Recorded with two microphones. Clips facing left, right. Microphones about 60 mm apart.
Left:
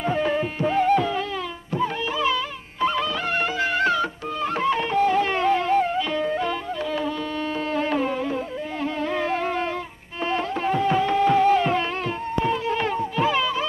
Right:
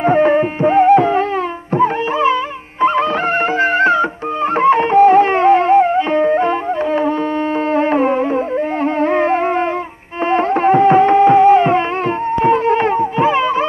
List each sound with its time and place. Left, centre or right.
0.0 s music: right
3.5 s music: right